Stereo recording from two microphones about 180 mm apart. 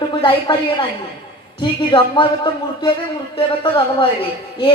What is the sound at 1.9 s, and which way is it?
Speech, 30° left (ahead or behind).